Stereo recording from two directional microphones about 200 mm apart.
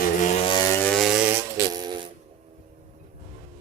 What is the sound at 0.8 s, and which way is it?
Chainsaw, centre (ahead or behind).